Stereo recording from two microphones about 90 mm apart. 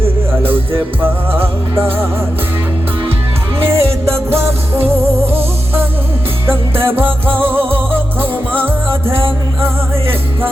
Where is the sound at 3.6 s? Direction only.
25° right (ahead or behind).